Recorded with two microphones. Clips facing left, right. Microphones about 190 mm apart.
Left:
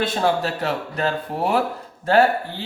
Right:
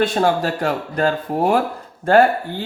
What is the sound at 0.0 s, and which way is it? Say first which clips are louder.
Speech: right 3 dB; 45° right (ahead or behind).